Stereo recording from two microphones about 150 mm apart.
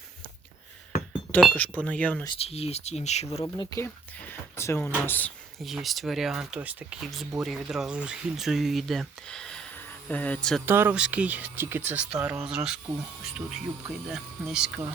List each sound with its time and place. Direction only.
1.5 s speech: 10° left (ahead or behind)
2.4 s speech: 45° left (ahead or behind)
3.4 s speech: 25° left (ahead or behind)
3.8 s speech: 10° left (ahead or behind)
5.5 s speech: centre (ahead or behind)
10.7 s speech: 15° right (ahead or behind)
12.5 s speech: 5° right (ahead or behind)